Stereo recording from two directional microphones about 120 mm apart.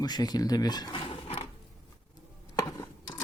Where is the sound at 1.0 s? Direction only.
60° left (ahead or behind).